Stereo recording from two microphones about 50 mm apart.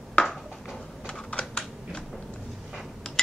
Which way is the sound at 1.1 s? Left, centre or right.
Left.